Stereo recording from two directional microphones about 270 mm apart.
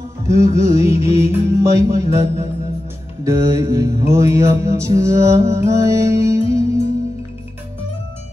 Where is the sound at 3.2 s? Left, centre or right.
Centre.